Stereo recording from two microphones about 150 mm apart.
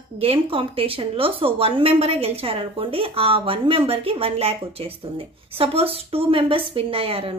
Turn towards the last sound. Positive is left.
turn(degrees=-40)  # may be behind; listen again after turning